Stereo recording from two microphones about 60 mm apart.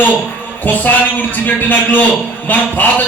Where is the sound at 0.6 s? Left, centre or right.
Left.